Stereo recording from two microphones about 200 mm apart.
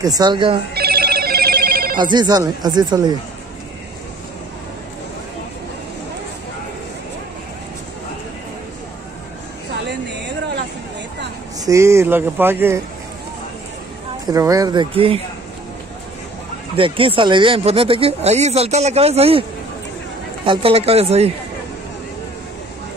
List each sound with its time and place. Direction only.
0.0 s speech: 20° right (ahead or behind)
0.7 s telephone bell ringing: 50° right (ahead or behind)
2.0 s speech: 20° right (ahead or behind)
11.6 s speech: 15° right (ahead or behind)
14.3 s speech: 15° right (ahead or behind)
16.7 s speech: 25° right (ahead or behind)
20.4 s speech: 30° right (ahead or behind)